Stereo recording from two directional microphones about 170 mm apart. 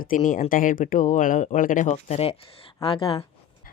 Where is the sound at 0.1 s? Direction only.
55° left (ahead or behind); by 3.2 s 30° left (ahead or behind).